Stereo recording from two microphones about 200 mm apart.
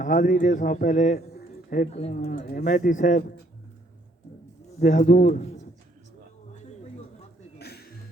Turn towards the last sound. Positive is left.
turn(degrees=55)  # may be behind; listen again after turning